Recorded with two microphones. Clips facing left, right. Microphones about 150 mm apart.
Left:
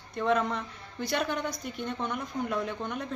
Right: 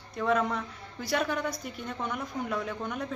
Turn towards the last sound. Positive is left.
turn(degrees=-5)  # may be behind; listen again after turning